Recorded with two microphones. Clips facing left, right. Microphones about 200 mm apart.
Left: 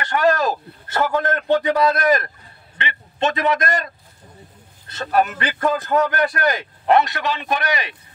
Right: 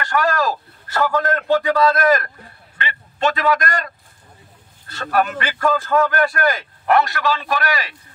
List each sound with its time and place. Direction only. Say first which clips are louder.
0.0 s a man's voice: left 1 dB; 20° left (ahead or behind)